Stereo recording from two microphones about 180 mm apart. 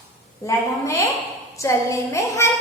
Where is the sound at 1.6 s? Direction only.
15° left (ahead or behind).